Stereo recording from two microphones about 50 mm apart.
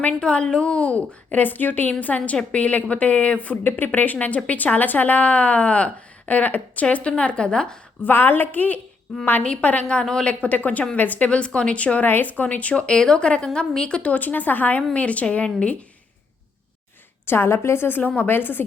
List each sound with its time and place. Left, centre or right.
0.1 s a woman's voice: centre
3.6 s a woman's voice: left; by 7.8 s centre
8.0 s a woman's voice: left
9.4 s a woman's voice: left
10.4 s speech: left
11.3 s a woman's voice: left
12.0 s a woman's voice: left
17.2 s a woman's voice: left